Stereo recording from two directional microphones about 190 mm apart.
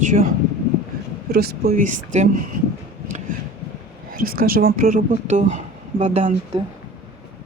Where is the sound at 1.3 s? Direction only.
55° right (ahead or behind).